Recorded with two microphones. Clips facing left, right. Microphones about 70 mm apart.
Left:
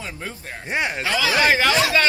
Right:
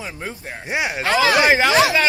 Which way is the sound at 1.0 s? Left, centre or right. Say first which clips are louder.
Right 7 dB; right.